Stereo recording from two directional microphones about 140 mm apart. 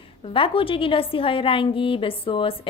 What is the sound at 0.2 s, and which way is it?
A woman's voice, 40° left (ahead or behind).